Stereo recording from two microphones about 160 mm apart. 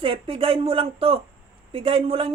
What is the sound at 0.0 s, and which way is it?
Speech, 35° right (ahead or behind).